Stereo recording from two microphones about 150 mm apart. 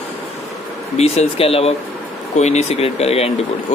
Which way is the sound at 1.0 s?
45° left (ahead or behind).